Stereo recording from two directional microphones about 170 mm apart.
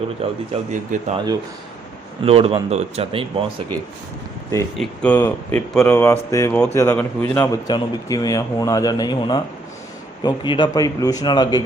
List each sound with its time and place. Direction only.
0.2 s speech: 40° right (ahead or behind)
2.2 s speech: 35° right (ahead or behind)
4.8 s speech: 10° left (ahead or behind)
5.9 s speech: 15° left (ahead or behind)